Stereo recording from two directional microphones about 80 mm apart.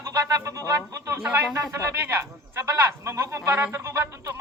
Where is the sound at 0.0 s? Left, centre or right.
Right.